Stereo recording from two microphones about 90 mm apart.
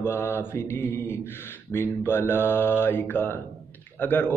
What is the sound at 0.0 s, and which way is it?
A man's voice, 25° left (ahead or behind).